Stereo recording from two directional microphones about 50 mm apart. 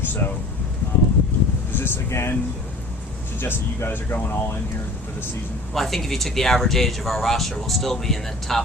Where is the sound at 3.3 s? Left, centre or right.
Left.